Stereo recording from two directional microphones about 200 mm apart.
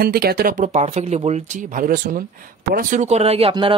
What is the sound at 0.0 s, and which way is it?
Speech, 50° right (ahead or behind).